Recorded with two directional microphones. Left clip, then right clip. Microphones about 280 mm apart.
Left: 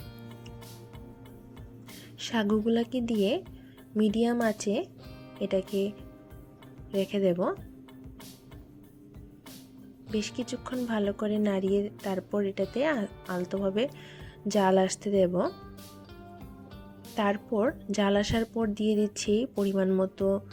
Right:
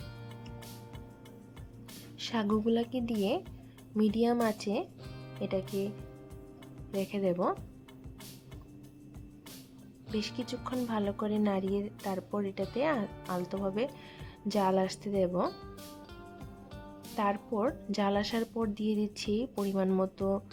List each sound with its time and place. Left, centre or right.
2.1 s speech: centre
7.0 s speech: centre
10.1 s speech: centre
17.2 s speech: centre